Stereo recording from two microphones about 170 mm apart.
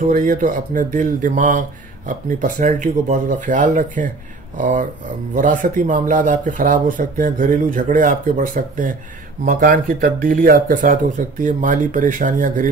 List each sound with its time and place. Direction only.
0.1 s speech: 55° right (ahead or behind)